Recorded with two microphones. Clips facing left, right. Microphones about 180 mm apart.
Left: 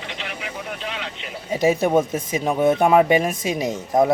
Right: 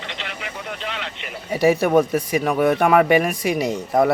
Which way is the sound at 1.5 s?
20° left (ahead or behind).